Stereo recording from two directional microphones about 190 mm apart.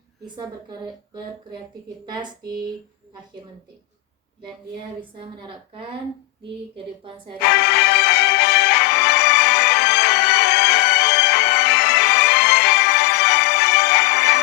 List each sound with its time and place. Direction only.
0.3 s a woman's voice: 20° right (ahead or behind)
5.2 s a woman's voice: 30° right (ahead or behind)
7.4 s music: 60° left (ahead or behind)